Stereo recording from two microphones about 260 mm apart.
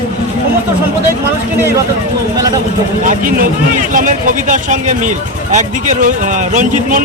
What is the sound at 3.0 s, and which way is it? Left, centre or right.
Speech, right.